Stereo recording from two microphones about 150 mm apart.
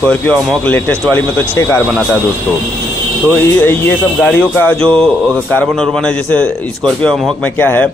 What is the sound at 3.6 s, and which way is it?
A man's voice, 15° left (ahead or behind).